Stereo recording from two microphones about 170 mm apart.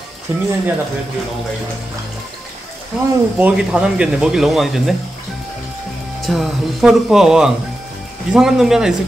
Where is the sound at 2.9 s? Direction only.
Centre (ahead or behind).